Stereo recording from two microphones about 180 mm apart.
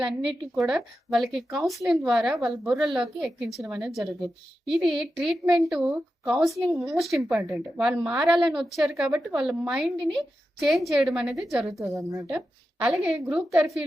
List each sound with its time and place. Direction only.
0.3 s a woman's voice: centre (ahead or behind)
11.6 s a woman's voice: 15° right (ahead or behind)
12.8 s a woman's voice: 5° right (ahead or behind)